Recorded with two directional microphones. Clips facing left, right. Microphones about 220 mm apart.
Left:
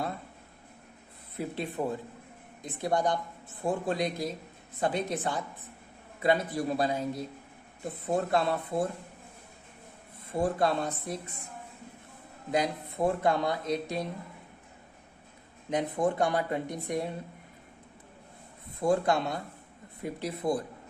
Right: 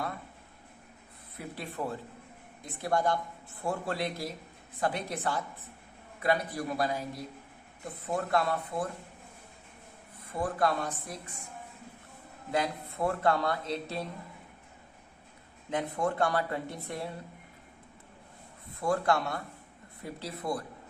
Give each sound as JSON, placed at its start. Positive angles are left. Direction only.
{"t": 1.4, "sound": "a man's voice", "side_deg": 20}
{"t": 10.3, "sound": "a man's voice", "side_deg": 25}
{"t": 12.5, "sound": "speech", "side_deg": 20}
{"t": 15.7, "sound": "speech", "side_deg": 20}
{"t": 18.8, "sound": "a man's voice", "side_deg": 20}